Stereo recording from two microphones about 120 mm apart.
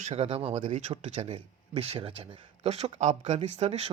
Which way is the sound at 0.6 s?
65° right (ahead or behind).